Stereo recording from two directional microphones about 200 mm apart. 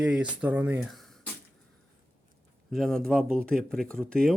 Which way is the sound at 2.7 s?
Centre (ahead or behind).